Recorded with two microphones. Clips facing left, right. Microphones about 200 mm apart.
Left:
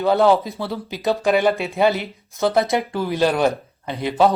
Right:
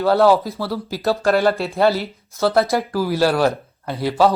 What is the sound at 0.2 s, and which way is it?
Speech, centre (ahead or behind).